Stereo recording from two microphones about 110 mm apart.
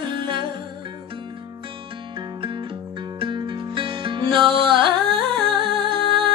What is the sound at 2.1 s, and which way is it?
Music, 45° right (ahead or behind).